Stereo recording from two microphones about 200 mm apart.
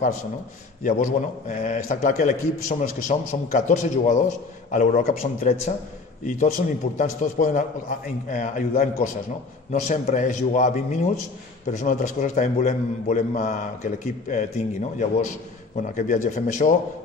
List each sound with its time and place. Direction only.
0.8 s a man's voice: 40° left (ahead or behind)